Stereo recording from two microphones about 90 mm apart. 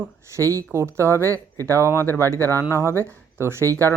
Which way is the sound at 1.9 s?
25° left (ahead or behind).